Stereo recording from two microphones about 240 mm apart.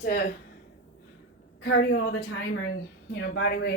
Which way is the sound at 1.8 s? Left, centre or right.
Left.